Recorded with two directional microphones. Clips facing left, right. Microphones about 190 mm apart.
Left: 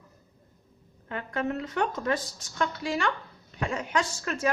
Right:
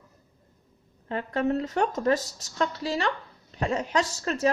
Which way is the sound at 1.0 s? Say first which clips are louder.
Right 4 dB; 35° right (ahead or behind).